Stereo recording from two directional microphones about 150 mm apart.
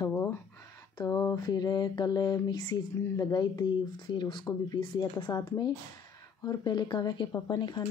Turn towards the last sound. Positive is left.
turn(degrees=30)  # may be behind; listen again after turning